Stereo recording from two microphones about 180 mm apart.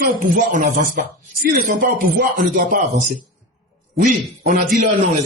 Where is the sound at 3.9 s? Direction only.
45° right (ahead or behind).